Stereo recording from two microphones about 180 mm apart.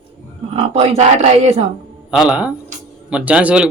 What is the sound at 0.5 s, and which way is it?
Speech, 35° right (ahead or behind).